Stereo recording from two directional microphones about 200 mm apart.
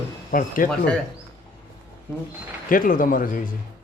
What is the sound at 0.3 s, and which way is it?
Speech, 45° left (ahead or behind).